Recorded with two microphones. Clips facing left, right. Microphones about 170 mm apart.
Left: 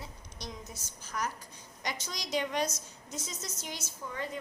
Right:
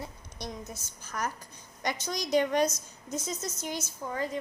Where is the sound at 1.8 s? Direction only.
55° right (ahead or behind).